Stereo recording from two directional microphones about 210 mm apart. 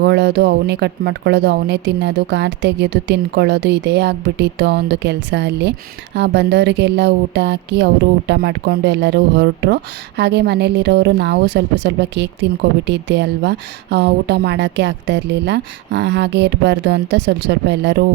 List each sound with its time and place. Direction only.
0.0 s a woman's voice: 55° right (ahead or behind)